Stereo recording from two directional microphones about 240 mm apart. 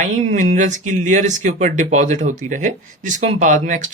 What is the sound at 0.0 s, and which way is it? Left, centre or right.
Speech, right.